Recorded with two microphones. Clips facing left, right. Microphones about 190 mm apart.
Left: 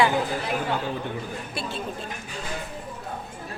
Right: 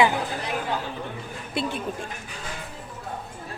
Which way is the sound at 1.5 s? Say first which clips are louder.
Right 6 dB; 15° right (ahead or behind).